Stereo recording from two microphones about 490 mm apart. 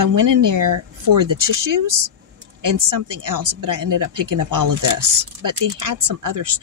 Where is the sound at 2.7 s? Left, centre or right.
Right.